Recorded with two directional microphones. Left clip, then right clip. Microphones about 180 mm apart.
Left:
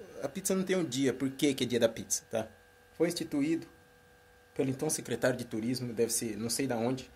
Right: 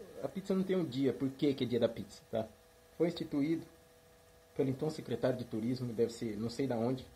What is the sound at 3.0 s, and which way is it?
Speech, 5° left (ahead or behind).